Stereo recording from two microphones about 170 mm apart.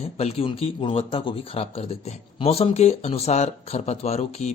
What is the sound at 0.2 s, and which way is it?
Speech, 35° left (ahead or behind).